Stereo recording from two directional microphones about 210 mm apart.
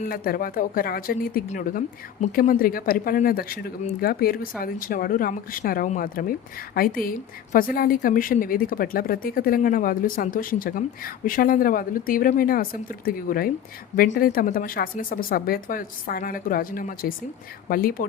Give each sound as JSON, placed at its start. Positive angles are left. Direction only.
{"t": 0.0, "sound": "a woman's voice", "side_deg": 45}